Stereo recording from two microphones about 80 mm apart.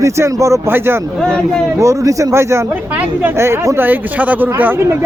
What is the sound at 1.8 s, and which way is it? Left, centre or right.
Speech, right.